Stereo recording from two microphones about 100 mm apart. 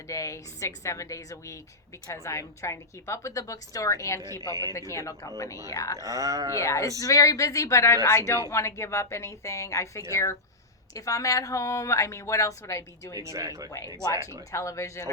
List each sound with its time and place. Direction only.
0.1 s a woman's voice: 30° left (ahead or behind)
6.0 s speech: 35° right (ahead or behind)
6.5 s a woman's voice: 30° left (ahead or behind)
13.1 s speech: 35° right (ahead or behind)
13.7 s a woman's voice: 40° left (ahead or behind)